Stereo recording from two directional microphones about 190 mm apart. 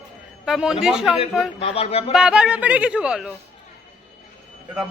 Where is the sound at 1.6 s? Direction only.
30° left (ahead or behind).